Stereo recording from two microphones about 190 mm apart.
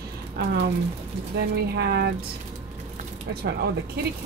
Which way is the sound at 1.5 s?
60° right (ahead or behind).